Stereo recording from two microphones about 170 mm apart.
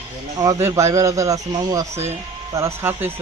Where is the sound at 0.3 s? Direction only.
20° right (ahead or behind).